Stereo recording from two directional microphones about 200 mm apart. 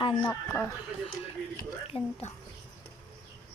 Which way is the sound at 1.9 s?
25° left (ahead or behind).